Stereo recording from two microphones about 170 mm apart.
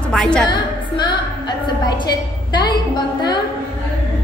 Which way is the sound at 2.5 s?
25° left (ahead or behind).